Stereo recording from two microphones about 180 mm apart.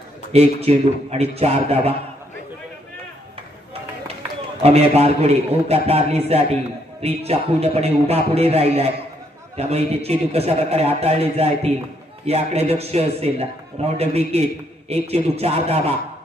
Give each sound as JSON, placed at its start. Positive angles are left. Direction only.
{"t": 0.3, "sound": "speech", "side_deg": -35}
{"t": 4.6, "sound": "speech", "side_deg": -35}